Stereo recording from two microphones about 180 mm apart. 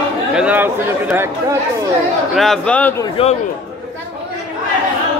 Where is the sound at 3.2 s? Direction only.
30° left (ahead or behind).